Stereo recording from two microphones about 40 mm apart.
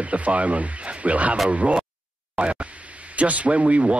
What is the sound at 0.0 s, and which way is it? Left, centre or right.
Speech, right.